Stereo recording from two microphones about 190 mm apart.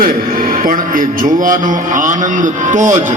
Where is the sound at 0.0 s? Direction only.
50° right (ahead or behind).